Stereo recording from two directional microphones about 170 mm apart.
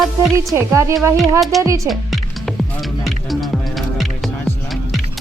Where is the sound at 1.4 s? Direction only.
Centre (ahead or behind).